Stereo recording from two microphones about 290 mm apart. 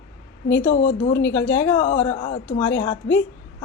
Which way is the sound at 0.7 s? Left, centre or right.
Left.